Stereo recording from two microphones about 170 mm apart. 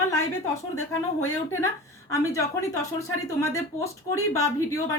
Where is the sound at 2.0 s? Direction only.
20° left (ahead or behind).